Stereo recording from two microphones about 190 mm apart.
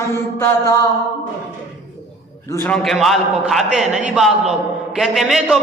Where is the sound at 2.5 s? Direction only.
5° left (ahead or behind).